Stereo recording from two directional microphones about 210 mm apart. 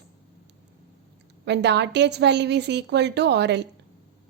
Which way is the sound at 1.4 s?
55° right (ahead or behind).